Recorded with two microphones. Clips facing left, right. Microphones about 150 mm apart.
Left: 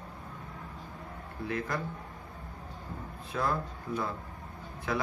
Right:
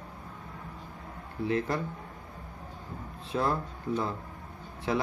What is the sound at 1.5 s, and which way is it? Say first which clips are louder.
Speech: right 5 dB; 30° right (ahead or behind).